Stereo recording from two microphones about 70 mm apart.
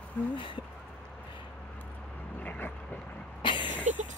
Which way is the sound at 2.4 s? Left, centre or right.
Left.